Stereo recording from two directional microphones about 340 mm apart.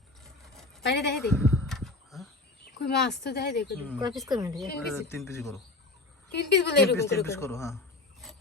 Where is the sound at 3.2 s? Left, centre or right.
Left.